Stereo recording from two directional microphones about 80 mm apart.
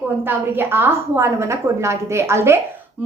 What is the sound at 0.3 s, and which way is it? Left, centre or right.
A woman's voice, right.